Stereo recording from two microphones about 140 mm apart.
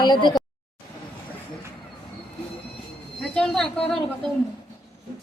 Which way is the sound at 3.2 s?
5° left (ahead or behind).